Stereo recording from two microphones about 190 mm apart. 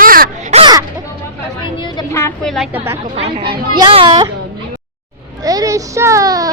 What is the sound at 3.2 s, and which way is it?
Music, 30° right (ahead or behind).